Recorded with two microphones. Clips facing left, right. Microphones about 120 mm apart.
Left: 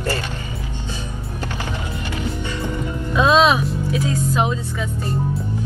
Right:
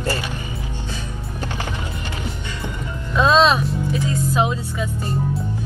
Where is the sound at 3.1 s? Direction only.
5° left (ahead or behind).